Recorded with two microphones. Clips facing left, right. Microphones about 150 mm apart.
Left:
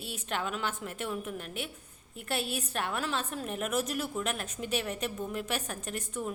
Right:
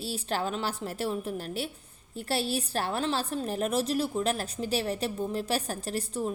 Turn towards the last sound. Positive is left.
turn(degrees=-30)  # may be behind; listen again after turning